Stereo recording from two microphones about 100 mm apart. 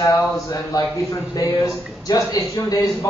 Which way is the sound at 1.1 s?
35° left (ahead or behind).